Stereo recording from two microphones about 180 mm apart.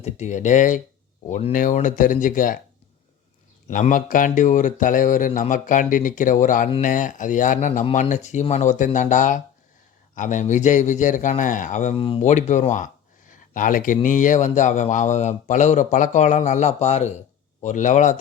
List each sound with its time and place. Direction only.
0.0 s a man's voice: 40° left (ahead or behind)
1.3 s speech: 35° left (ahead or behind)
1.5 s a man's voice: 45° left (ahead or behind)
3.7 s a man's voice: 45° left (ahead or behind)